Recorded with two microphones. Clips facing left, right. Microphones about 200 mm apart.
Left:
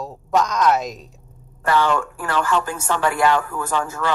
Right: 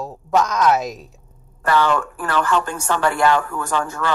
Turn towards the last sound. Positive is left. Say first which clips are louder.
# right 1 dB
turn(degrees=5)  # may be behind; listen again after turning